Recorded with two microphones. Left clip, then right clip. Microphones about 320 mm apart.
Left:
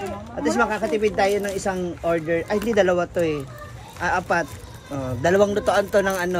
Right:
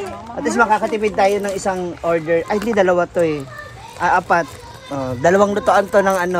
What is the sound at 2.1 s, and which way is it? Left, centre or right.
Speech, right.